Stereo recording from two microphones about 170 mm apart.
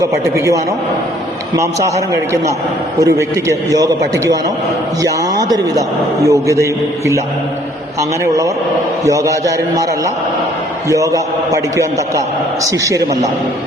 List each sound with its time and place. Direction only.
0.0 s a man's voice: 20° right (ahead or behind)
3.7 s a man's voice: 20° right (ahead or behind)
9.0 s a man's voice: 20° right (ahead or behind)
10.8 s a man's voice: 20° right (ahead or behind)